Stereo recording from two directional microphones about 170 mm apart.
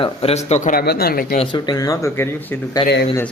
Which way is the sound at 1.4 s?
30° left (ahead or behind).